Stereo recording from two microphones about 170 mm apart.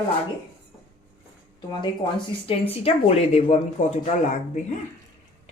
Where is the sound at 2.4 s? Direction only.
35° left (ahead or behind).